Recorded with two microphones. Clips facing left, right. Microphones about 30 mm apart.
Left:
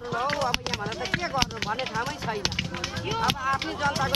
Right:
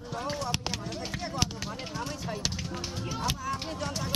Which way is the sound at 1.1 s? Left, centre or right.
Left.